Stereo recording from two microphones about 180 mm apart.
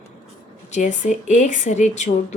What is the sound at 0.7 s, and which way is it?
Speech, 45° left (ahead or behind).